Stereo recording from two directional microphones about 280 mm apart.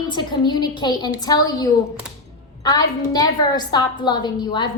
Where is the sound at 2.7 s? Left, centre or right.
Centre.